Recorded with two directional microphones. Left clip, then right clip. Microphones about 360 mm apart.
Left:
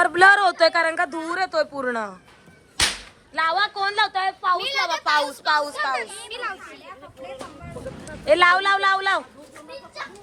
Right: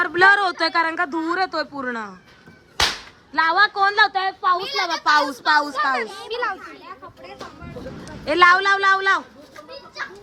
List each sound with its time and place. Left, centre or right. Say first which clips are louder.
0.0 s a woman's voice: left 1 dB; centre
3.3 s a woman's voice: right 5 dB; centre
6.0 s speech: right 5 dB; right
8.2 s a woman's voice: right 2 dB; centre